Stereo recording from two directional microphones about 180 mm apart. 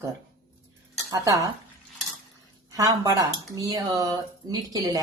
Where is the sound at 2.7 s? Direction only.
20° right (ahead or behind).